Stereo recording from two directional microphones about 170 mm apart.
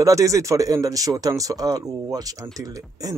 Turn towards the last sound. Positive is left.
turn(degrees=-20)  # may be behind; listen again after turning